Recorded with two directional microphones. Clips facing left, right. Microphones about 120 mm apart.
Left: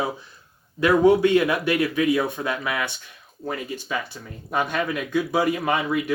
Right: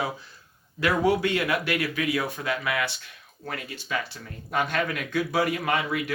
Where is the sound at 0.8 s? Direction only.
20° left (ahead or behind).